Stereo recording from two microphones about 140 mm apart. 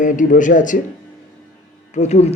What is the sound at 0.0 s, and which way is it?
Speech, 65° left (ahead or behind).